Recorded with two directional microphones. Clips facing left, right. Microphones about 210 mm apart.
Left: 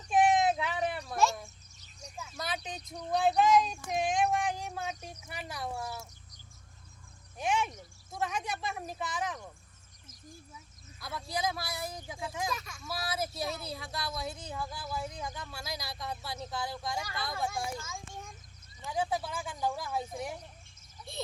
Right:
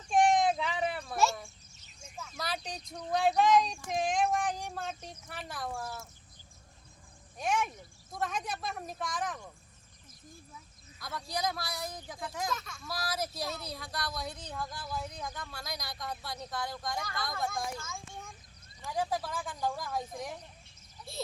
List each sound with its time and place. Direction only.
0.1 s a sound: 5° left (ahead or behind)
2.3 s speech: centre (ahead or behind)
4.9 s speech: 15° left (ahead or behind)
5.3 s speech: centre (ahead or behind)
7.3 s speech: 5° left (ahead or behind)
11.0 s speech: 5° left (ahead or behind)